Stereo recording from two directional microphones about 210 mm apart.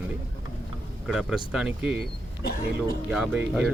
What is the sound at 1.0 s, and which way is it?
Speech, centre (ahead or behind).